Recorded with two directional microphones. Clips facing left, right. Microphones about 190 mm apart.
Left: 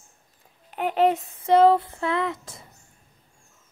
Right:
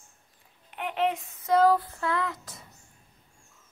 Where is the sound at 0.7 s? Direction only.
40° left (ahead or behind).